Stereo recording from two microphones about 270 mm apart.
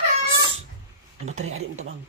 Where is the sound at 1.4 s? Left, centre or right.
Right.